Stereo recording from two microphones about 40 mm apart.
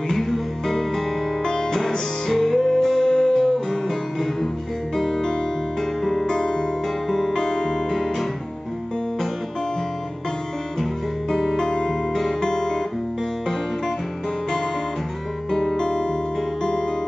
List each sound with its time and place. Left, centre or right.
0.1 s music: centre
4.9 s music: centre
10.8 s guitar: centre
11.5 s music: centre
12.1 s music: centre
15.5 s music: centre